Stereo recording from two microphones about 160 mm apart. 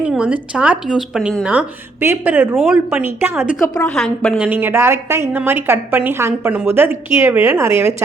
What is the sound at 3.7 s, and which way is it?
Speech, 5° left (ahead or behind).